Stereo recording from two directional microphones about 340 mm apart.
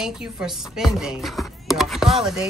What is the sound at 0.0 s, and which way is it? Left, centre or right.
Speech, centre.